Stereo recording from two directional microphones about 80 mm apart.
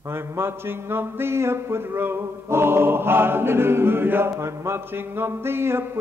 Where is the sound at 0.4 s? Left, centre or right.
Right.